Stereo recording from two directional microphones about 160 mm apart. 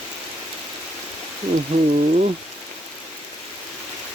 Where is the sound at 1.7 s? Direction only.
45° right (ahead or behind).